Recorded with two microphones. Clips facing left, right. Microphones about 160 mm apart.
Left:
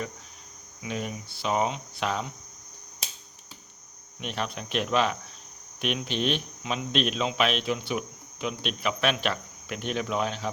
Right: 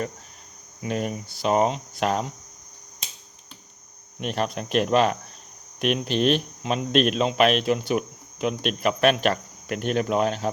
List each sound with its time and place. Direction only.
0.8 s speech: 45° right (ahead or behind)
4.2 s speech: 45° right (ahead or behind)